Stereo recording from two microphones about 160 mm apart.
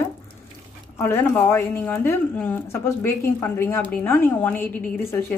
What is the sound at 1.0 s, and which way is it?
A woman's voice, 15° left (ahead or behind).